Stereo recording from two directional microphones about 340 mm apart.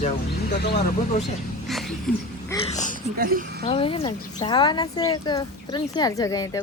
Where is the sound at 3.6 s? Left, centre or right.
Centre.